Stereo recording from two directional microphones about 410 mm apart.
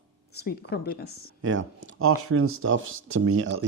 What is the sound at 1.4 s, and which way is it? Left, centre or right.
Speech, right.